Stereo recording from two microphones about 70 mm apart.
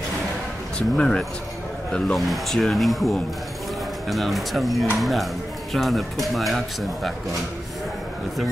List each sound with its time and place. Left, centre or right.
0.7 s speech: centre
2.1 s speech: centre